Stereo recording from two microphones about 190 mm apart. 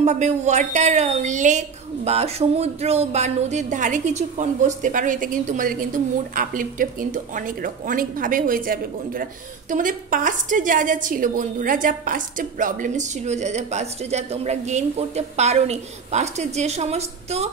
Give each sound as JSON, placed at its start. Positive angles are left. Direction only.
{"t": 0.0, "sound": "a woman's voice", "side_deg": -40}